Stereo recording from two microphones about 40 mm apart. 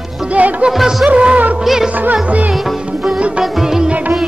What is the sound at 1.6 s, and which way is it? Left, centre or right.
Music, centre.